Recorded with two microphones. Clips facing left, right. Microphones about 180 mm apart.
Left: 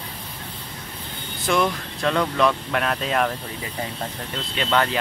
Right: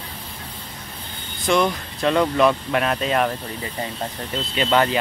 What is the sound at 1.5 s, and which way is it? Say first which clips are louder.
Speech: right 2 dB; centre (ahead or behind).